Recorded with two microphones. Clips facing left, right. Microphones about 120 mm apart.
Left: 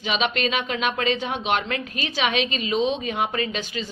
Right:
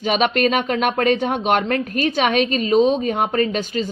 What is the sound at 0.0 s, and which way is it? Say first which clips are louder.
Speech: right 6 dB; 50° right (ahead or behind).